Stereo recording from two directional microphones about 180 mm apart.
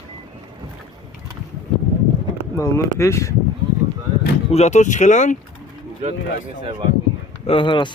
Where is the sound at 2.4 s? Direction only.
15° left (ahead or behind).